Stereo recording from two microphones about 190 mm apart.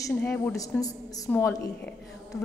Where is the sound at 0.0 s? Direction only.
15° left (ahead or behind).